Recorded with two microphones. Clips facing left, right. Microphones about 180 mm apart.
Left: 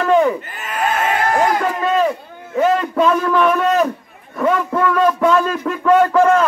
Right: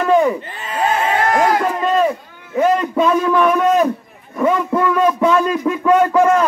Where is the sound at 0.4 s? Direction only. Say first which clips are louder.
Right 2 dB; 30° right (ahead or behind).